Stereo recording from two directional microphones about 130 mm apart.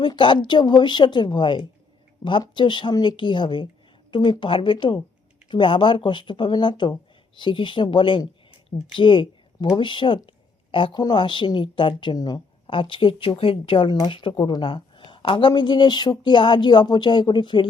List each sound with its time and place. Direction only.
0.0 s a woman's voice: 40° left (ahead or behind)